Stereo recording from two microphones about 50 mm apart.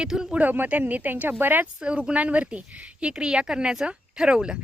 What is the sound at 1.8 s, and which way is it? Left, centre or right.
Speech, right.